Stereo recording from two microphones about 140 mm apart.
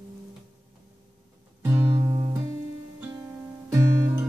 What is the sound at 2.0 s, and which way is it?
Music, 25° right (ahead or behind).